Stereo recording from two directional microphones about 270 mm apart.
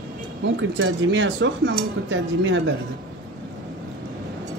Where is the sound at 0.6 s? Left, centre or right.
Right.